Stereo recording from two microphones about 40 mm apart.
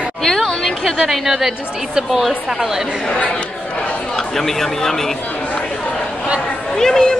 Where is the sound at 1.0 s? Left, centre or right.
Centre.